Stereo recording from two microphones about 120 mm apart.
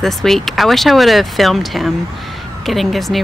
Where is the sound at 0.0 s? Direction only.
Centre (ahead or behind).